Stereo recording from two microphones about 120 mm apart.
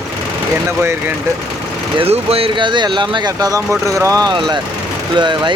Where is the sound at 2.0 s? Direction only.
55° right (ahead or behind).